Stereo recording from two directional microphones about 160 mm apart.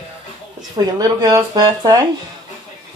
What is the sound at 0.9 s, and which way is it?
Speech, 25° right (ahead or behind).